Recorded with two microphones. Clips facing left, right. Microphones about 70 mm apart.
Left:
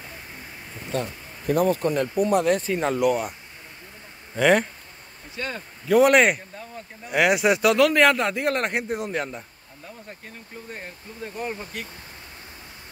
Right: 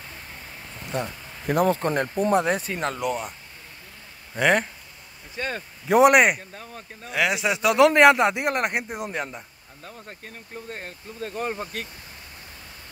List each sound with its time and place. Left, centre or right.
0.9 s a sound: centre
1.7 s speech: right
2.5 s speech: centre
4.4 s speech: centre
5.9 s speech: centre
7.1 s speech: centre
7.7 s a man's voice: centre